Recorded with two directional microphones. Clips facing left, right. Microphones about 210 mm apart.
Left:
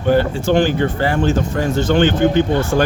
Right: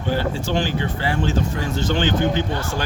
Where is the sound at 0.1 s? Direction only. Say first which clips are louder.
Left 8 dB; 55° left (ahead or behind).